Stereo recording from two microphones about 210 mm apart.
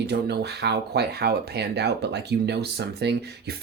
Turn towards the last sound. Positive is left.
turn(degrees=-50)  # may be behind; listen again after turning